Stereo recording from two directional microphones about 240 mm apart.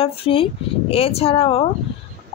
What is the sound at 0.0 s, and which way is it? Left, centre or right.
A woman's voice, left.